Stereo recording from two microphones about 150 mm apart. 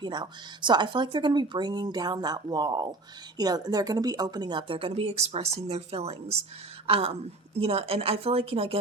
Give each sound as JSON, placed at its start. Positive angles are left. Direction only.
{"t": 0.0, "sound": "a woman's voice", "side_deg": -30}